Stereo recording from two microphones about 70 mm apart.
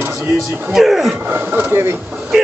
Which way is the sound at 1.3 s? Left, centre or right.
Right.